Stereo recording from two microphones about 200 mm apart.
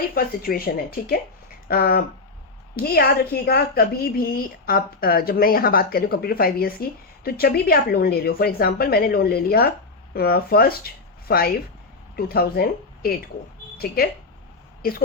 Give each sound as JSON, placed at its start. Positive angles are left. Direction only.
{"t": 0.1, "sound": "a woman's voice", "side_deg": 50}